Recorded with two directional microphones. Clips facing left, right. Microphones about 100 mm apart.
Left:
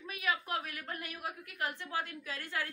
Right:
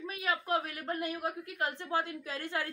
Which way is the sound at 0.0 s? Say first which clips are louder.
Right 2 dB; 30° right (ahead or behind).